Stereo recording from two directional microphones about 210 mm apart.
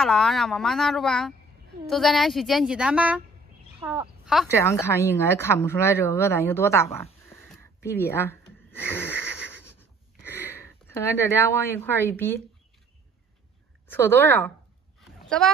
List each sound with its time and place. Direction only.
0.0 s speech: centre (ahead or behind)
3.8 s speech: 20° right (ahead or behind)
4.5 s speech: 15° left (ahead or behind)
9.8 s a sound: 10° left (ahead or behind)
13.8 s speech: 10° left (ahead or behind)
15.0 s a sound: 5° left (ahead or behind)